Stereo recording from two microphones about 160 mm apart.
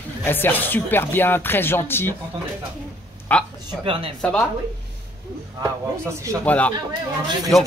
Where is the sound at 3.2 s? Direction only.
10° left (ahead or behind).